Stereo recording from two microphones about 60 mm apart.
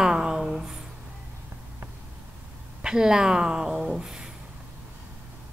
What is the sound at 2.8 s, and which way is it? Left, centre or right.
A woman's voice, centre.